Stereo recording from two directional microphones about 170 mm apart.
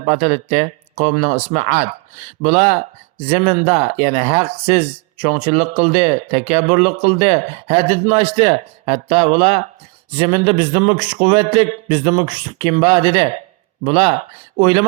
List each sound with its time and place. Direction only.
0.0 s speech: 40° right (ahead or behind)